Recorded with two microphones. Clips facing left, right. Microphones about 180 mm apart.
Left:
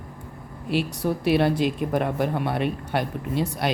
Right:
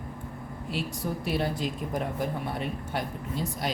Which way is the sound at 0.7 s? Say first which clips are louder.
Left 8 dB; 75° left (ahead or behind).